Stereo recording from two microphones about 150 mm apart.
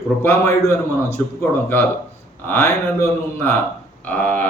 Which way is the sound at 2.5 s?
15° left (ahead or behind).